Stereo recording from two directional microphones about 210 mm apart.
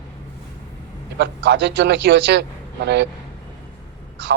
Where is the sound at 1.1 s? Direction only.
55° right (ahead or behind).